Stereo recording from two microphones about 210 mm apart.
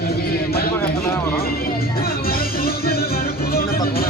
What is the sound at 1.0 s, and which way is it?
Speech, 10° left (ahead or behind).